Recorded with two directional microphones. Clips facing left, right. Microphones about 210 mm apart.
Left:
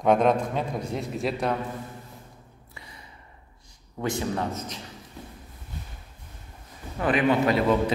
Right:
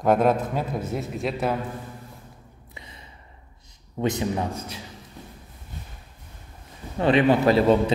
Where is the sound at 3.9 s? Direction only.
20° right (ahead or behind).